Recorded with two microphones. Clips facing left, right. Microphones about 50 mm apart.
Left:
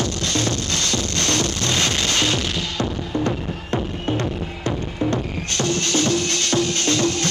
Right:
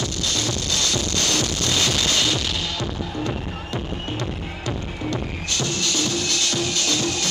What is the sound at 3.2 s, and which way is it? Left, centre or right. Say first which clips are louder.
Music: left 3 dB; left.